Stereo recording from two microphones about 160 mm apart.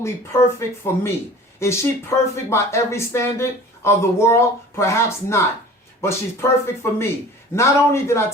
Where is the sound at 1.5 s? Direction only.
15° left (ahead or behind).